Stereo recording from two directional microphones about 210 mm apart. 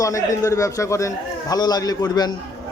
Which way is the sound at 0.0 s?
15° left (ahead or behind).